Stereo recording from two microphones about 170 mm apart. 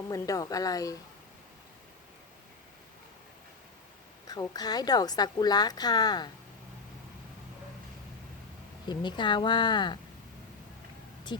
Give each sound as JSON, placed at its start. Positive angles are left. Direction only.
{"t": 0.1, "sound": "a woman's voice", "side_deg": 20}
{"t": 4.3, "sound": "a woman's voice", "side_deg": 25}
{"t": 8.9, "sound": "a woman's voice", "side_deg": 25}
{"t": 11.3, "sound": "a woman's voice", "side_deg": 25}